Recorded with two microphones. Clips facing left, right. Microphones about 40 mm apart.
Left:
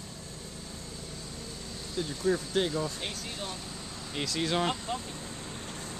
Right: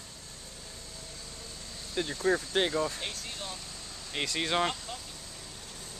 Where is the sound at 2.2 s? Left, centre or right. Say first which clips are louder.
Even; right.